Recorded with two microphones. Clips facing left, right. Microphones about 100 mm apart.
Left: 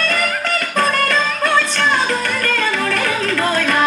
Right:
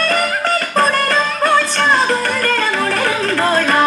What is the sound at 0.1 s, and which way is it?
Music, 35° right (ahead or behind).